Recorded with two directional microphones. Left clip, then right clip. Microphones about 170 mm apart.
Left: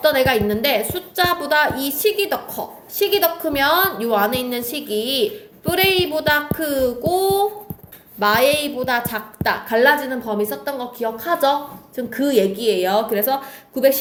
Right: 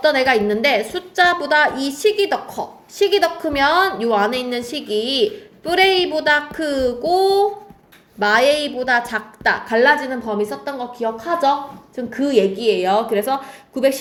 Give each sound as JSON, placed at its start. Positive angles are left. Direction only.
{"t": 0.0, "sound": "a woman's voice", "side_deg": -35}